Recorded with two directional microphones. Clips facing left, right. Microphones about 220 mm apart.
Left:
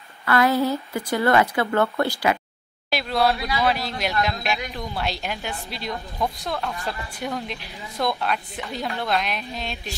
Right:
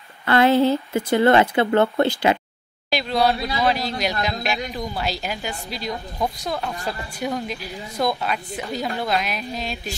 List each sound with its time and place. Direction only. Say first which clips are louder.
0.2 s speech: right 4 dB; 25° right (ahead or behind)
2.9 s a woman's voice: right 2 dB; centre (ahead or behind)